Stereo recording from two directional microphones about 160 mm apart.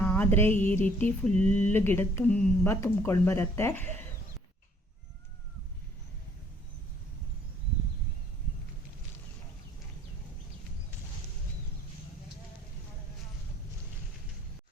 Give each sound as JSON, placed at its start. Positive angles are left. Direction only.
{"t": 0.0, "sound": "music", "side_deg": 10}
{"t": 0.6, "sound": "mantra", "side_deg": 10}